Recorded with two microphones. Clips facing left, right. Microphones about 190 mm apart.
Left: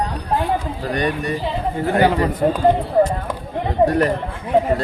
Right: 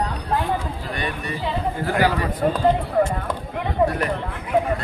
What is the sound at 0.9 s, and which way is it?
Speech, 45° left (ahead or behind).